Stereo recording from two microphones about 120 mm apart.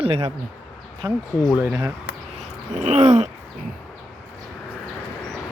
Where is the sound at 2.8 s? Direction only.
80° right.